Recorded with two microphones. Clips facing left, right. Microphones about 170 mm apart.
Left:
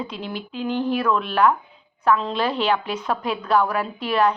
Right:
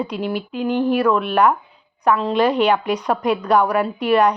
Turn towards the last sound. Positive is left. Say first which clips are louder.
# right 5 dB
turn(degrees=-15)  # may be behind; listen again after turning